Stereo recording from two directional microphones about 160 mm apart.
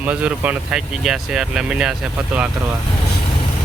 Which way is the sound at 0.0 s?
10° right (ahead or behind).